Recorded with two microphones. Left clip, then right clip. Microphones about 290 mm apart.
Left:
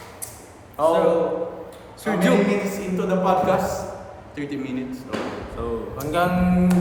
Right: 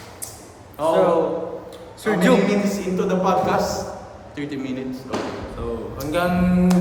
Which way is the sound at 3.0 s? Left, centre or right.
Centre.